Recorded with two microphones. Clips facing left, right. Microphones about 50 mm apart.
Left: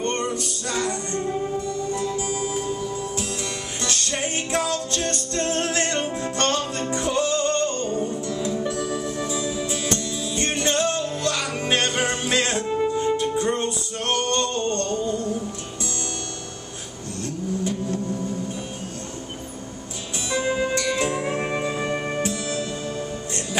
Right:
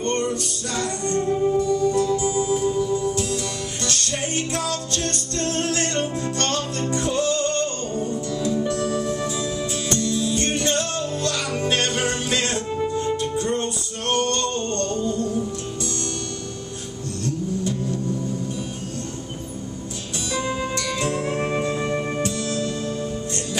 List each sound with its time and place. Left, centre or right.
0.0 s music: centre
3.8 s music: centre
20.2 s music: centre